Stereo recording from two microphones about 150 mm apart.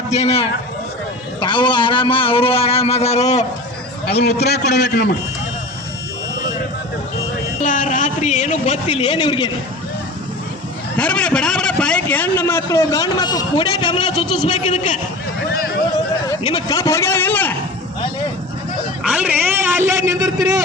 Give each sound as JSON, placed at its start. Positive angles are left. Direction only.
{"t": 0.1, "sound": "a man's voice", "side_deg": 45}
{"t": 1.4, "sound": "a man's voice", "side_deg": 30}
{"t": 4.1, "sound": "a man's voice", "side_deg": 90}
{"t": 7.6, "sound": "a man's voice", "side_deg": 60}
{"t": 10.9, "sound": "a man's voice", "side_deg": 5}
{"t": 14.4, "sound": "a man's voice", "side_deg": 45}
{"t": 15.5, "sound": "a sound", "side_deg": 90}
{"t": 16.4, "sound": "a man's voice", "side_deg": 40}
{"t": 16.6, "sound": "a man's voice", "side_deg": 25}
{"t": 19.0, "sound": "a man's voice", "side_deg": -10}